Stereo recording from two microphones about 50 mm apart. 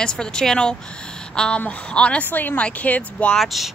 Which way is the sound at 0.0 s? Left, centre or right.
Centre.